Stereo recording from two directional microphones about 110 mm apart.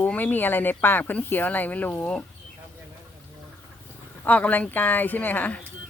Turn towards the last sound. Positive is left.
turn(degrees=15)  # may be behind; listen again after turning